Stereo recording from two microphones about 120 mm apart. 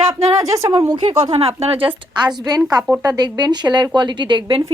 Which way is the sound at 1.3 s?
55° right (ahead or behind).